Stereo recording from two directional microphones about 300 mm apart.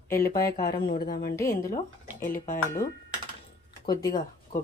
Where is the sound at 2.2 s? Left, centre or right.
Left.